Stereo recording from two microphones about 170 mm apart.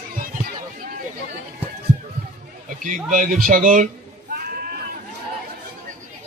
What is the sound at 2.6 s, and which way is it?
A man's voice, 50° right (ahead or behind).